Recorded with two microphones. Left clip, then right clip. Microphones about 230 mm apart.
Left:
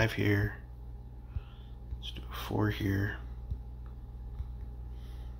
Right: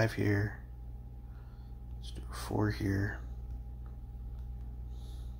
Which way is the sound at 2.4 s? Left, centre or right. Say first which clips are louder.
Left 1 dB; centre.